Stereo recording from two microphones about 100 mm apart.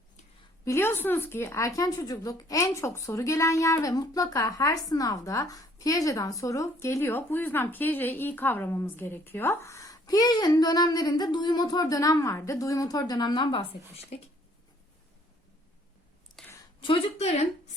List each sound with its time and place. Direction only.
0.6 s a woman's voice: 25° left (ahead or behind); by 14.2 s 80° left
16.4 s a sound: 5° left (ahead or behind)
16.8 s speech: 75° left (ahead or behind)